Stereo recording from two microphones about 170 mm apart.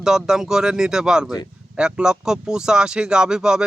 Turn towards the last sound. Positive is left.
turn(degrees=-5)  # may be behind; listen again after turning